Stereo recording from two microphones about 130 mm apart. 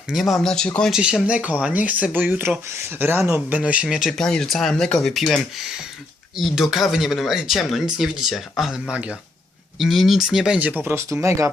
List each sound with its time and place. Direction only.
0.1 s speech: centre (ahead or behind)
0.9 s speech: 5° right (ahead or behind)
10.8 s speech: 20° right (ahead or behind)